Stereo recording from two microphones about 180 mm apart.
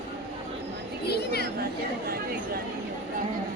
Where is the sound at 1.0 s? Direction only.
65° left (ahead or behind).